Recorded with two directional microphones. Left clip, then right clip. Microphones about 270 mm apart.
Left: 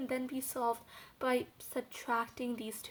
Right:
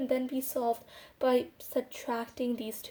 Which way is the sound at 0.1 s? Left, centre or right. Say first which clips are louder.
Right 7 dB; centre.